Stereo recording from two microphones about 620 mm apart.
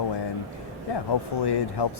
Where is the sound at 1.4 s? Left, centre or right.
Left.